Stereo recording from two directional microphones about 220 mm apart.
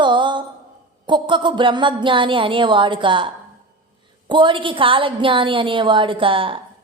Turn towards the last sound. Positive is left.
turn(degrees=-25)  # may be behind; listen again after turning